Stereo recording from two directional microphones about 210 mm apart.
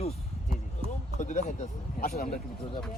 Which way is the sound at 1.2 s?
35° left (ahead or behind).